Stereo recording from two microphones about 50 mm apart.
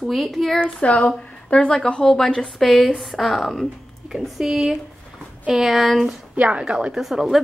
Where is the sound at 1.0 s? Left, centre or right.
Left.